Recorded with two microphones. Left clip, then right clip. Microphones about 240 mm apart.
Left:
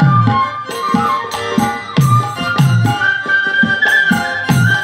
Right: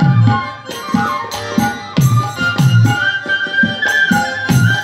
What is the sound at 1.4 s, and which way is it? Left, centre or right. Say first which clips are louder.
Music: left 1 dB; left.